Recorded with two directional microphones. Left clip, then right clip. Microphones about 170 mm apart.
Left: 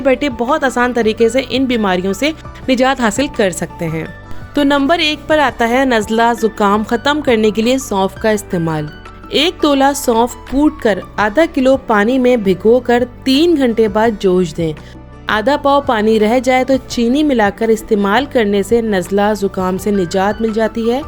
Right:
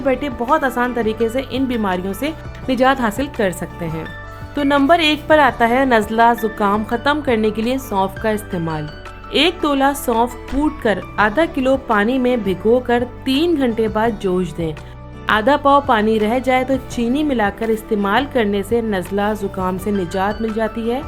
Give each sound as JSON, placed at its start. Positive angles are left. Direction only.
{"t": 0.0, "sound": "speech", "side_deg": 35}